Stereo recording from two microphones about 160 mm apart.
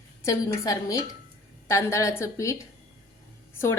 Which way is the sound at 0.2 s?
20° left (ahead or behind).